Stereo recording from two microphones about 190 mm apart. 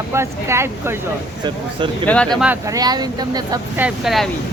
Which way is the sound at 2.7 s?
20° right (ahead or behind).